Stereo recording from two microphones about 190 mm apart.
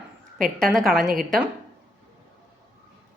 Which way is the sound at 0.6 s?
Centre (ahead or behind).